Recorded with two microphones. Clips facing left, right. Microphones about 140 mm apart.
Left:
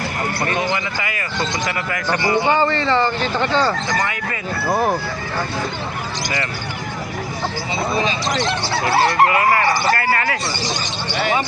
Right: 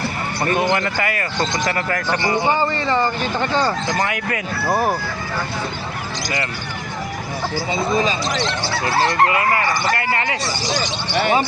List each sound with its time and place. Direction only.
0.5 s speech: 55° right (ahead or behind)
2.1 s speech: 10° left (ahead or behind)
2.5 s speech: 15° right (ahead or behind)
4.7 s speech: 5° right (ahead or behind)
9.2 s speech: 30° left (ahead or behind)
9.9 s bow-wow: 20° right (ahead or behind)